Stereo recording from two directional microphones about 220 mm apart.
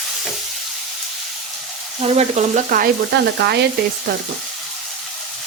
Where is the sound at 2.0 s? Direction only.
30° right (ahead or behind); by 3.6 s 50° right (ahead or behind).